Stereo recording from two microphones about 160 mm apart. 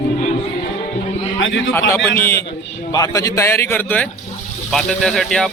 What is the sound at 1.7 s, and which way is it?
A man's voice, 15° left (ahead or behind).